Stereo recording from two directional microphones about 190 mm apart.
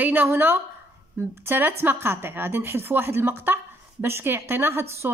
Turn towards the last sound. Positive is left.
turn(degrees=-15)  # may be behind; listen again after turning